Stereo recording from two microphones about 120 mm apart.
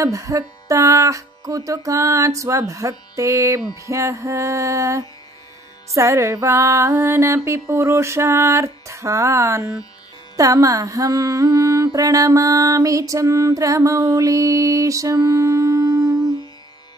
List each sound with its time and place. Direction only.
0.0 s music: 25° right (ahead or behind)